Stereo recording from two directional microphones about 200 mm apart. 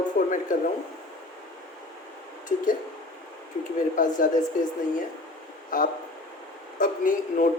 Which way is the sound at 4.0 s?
40° left (ahead or behind).